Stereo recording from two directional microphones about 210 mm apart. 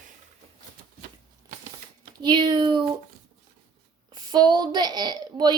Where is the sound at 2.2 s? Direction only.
20° right (ahead or behind).